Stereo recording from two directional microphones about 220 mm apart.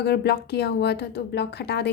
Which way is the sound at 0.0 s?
50° left (ahead or behind).